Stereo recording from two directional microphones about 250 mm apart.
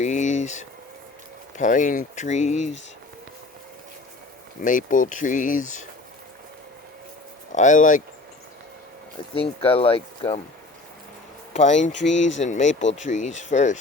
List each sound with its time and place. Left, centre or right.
0.0 s a sound: left
1.5 s speech: left
4.6 s speech: left
7.5 s speech: left
9.3 s speech: left
11.5 s speech: left